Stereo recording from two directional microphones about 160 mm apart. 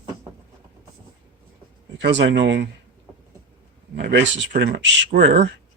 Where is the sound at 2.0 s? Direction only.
90° right.